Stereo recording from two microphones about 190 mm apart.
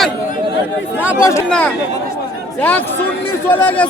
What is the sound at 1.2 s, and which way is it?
Speech, 15° left (ahead or behind).